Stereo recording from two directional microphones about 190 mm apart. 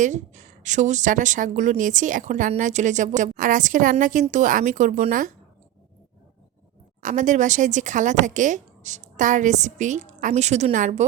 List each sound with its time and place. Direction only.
0.0 s a woman's voice: 40° right (ahead or behind)
7.0 s a woman's voice: 40° right (ahead or behind)